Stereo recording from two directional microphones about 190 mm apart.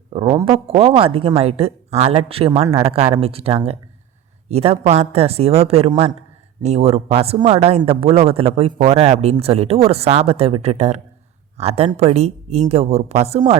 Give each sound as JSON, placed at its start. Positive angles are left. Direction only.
{"t": 0.1, "sound": "speech", "side_deg": -25}